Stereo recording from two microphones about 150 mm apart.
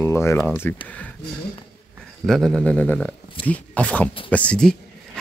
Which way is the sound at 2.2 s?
Centre (ahead or behind).